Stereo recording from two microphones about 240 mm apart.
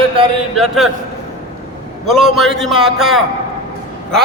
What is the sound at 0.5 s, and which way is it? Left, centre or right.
Speech, centre.